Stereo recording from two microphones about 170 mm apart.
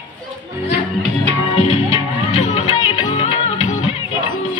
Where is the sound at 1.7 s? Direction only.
40° left (ahead or behind).